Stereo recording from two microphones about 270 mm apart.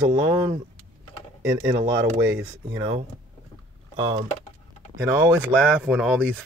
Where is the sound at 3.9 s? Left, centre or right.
Centre.